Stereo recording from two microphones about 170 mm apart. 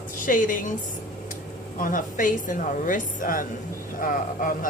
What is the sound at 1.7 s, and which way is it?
A woman's voice, 50° left (ahead or behind).